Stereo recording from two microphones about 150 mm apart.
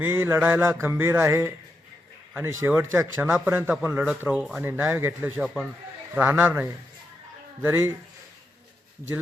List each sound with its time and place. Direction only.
0.0 s a man's voice: 15° right (ahead or behind)